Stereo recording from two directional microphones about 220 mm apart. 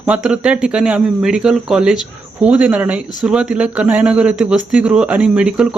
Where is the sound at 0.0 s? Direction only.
5° right (ahead or behind).